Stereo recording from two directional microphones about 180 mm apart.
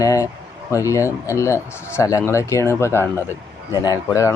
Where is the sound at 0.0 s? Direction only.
20° left (ahead or behind).